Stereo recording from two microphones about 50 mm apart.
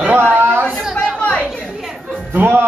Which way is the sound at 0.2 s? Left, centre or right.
Right.